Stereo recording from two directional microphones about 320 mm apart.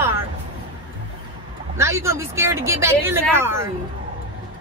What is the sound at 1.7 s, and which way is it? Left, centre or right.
Speech, centre.